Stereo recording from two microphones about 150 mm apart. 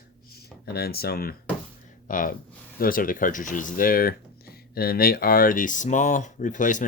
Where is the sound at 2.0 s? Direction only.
65° left (ahead or behind).